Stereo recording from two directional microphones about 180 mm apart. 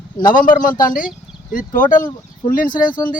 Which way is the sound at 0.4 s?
50° left (ahead or behind).